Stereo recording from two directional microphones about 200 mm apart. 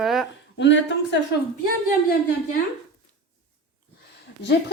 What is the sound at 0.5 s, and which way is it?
Speech, 65° left (ahead or behind).